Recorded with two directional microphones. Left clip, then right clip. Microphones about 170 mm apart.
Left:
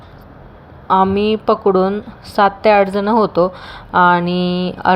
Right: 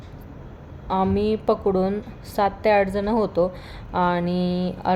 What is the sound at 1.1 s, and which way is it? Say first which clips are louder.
A woman's voice: left 7 dB; 15° left (ahead or behind).